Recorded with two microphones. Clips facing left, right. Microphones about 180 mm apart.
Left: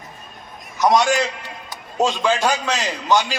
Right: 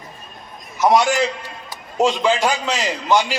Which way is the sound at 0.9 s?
15° right (ahead or behind).